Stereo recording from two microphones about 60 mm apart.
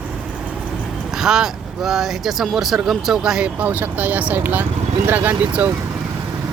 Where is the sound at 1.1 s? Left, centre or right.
Centre.